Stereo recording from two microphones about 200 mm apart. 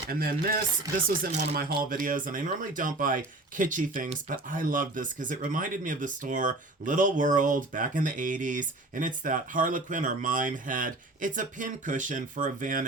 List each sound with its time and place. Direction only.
0.1 s speech: 50° right (ahead or behind)